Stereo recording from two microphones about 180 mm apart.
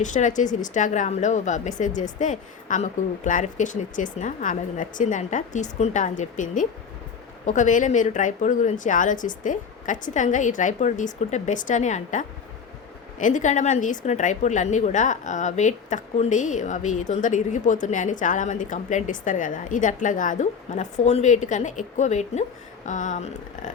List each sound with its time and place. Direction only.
0.0 s a woman's voice: 45° left (ahead or behind)